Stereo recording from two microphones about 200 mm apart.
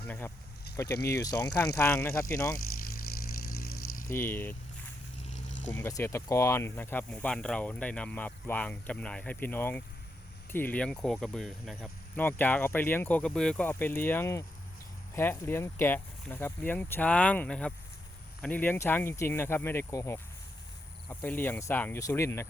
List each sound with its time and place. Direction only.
0.0 s speech: 10° left (ahead or behind)
3.7 s a sound: 90° left
4.0 s speech: 10° left (ahead or behind)
5.7 s speech: 10° left (ahead or behind)